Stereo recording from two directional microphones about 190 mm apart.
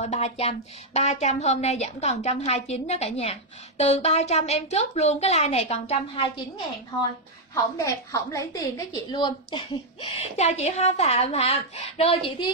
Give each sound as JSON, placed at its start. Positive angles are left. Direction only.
{"t": 0.0, "sound": "a woman's voice", "side_deg": 35}
{"t": 7.5, "sound": "a woman's voice", "side_deg": 15}